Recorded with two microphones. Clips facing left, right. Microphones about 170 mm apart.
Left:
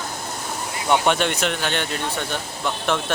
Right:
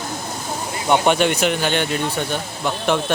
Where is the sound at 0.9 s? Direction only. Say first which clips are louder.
Right 3 dB; 5° right (ahead or behind).